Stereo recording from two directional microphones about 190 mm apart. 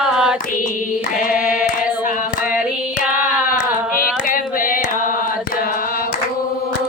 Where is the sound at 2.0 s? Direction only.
45° left (ahead or behind).